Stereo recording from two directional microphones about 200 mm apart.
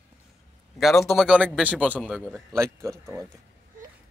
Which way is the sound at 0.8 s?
Centre (ahead or behind).